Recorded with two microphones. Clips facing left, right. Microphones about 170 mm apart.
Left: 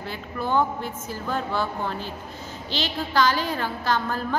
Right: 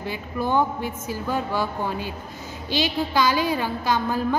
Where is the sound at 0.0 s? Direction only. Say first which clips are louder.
Right 3 dB; 15° right (ahead or behind).